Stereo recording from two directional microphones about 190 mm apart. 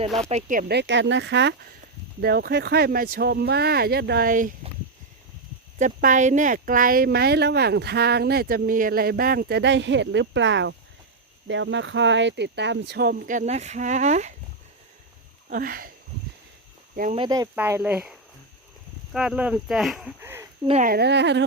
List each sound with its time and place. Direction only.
0.3 s speech: 40° right (ahead or behind)
0.7 s speech: 70° right (ahead or behind)
2.2 s speech: 55° right (ahead or behind)
5.8 s speech: 40° right (ahead or behind)
15.4 s speech: 50° right (ahead or behind)
16.9 s speech: 45° right (ahead or behind)
17.2 s speech: 20° right (ahead or behind)
20.8 s speech: 55° right (ahead or behind)